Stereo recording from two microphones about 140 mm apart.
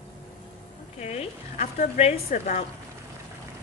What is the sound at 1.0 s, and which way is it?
A woman's voice, 50° left (ahead or behind).